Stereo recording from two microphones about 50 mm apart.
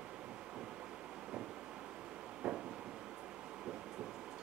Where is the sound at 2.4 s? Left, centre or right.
Centre.